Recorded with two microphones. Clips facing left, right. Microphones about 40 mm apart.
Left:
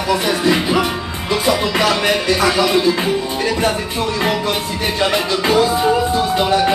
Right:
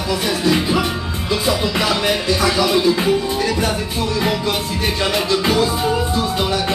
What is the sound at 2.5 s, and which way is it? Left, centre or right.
Music, centre.